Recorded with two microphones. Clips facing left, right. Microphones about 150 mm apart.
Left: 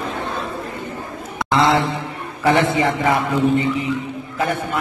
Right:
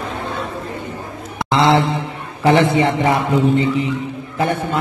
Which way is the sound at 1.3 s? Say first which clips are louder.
Right 2 dB; 25° right (ahead or behind).